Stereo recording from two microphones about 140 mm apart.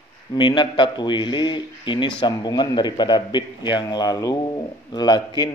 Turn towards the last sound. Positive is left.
turn(degrees=30)  # may be behind; listen again after turning